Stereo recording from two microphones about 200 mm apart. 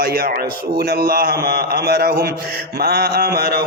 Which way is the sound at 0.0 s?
50° right (ahead or behind).